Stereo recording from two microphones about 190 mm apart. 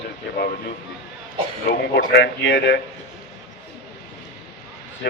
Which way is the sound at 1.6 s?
50° left (ahead or behind).